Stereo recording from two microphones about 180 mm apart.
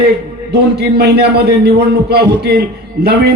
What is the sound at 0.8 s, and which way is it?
A man's voice, 65° right (ahead or behind).